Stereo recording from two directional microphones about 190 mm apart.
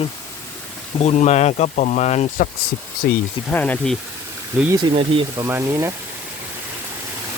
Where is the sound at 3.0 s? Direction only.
60° left (ahead or behind).